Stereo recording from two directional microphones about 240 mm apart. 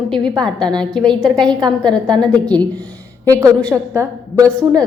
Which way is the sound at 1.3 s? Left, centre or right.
Centre.